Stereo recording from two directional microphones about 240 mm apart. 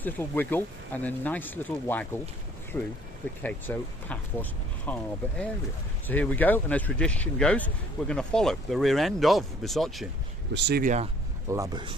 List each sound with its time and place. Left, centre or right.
0.0 s speech: centre
6.1 s speech: centre
10.5 s speech: right
11.4 s speech: centre